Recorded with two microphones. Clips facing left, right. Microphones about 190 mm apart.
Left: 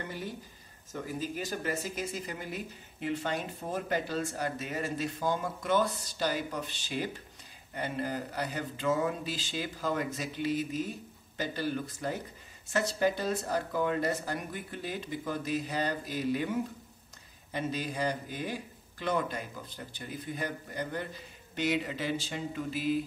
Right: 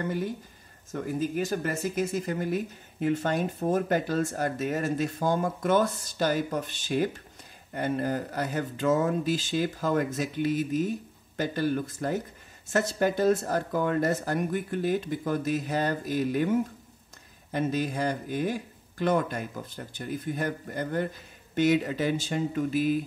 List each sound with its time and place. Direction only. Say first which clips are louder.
0.0 s speech: right 8 dB; 50° right (ahead or behind)